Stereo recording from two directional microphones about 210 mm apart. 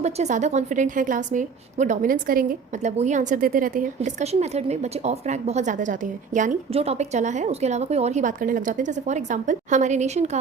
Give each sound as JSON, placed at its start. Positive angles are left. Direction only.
{"t": 0.0, "sound": "a woman's voice", "side_deg": -35}